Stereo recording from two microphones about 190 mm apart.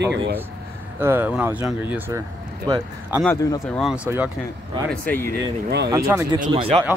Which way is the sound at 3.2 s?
15° left (ahead or behind).